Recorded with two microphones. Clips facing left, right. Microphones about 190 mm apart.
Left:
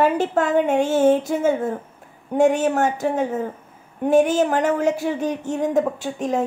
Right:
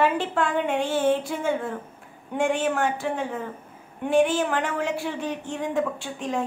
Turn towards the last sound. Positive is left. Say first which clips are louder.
# left 6 dB
turn(degrees=40)  # may be behind; listen again after turning